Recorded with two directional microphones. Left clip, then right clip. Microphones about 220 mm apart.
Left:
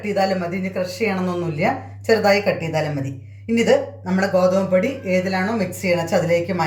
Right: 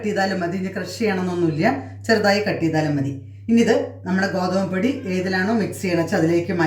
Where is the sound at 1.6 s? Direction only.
30° left (ahead or behind).